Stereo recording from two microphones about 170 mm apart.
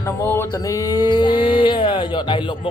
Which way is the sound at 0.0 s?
15° left (ahead or behind).